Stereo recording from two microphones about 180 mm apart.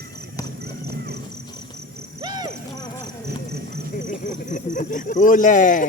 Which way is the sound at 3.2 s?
65° right (ahead or behind).